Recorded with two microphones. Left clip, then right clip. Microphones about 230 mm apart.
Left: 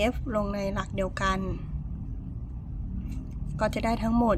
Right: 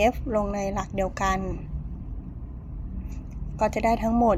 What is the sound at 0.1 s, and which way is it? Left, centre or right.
A woman's voice, left.